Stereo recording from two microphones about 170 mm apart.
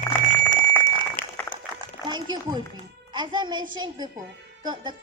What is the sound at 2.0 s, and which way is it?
A woman's voice, 25° right (ahead or behind).